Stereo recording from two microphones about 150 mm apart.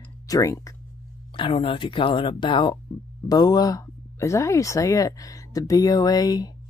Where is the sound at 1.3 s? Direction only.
35° left (ahead or behind).